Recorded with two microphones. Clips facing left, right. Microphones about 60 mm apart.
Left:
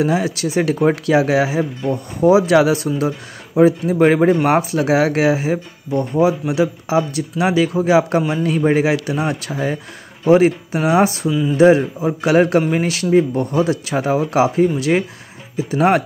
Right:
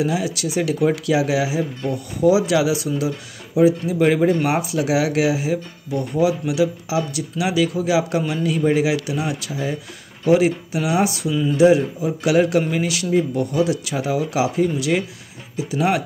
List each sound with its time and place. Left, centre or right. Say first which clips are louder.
0.0 s speech: left 4 dB; left
11.2 s speech: left 3 dB; centre
11.5 s speech: left 3 dB; left